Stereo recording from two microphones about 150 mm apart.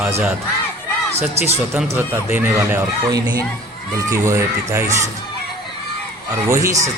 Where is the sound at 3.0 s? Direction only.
25° right (ahead or behind).